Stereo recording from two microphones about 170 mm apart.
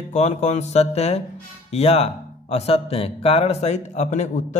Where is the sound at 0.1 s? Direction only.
45° left (ahead or behind).